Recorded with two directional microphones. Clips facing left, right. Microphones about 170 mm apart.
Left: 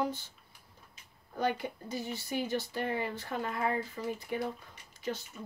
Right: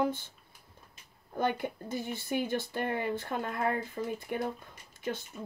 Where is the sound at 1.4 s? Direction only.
50° right (ahead or behind).